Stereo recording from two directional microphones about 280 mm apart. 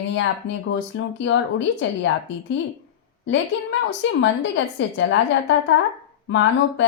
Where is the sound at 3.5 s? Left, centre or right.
Left.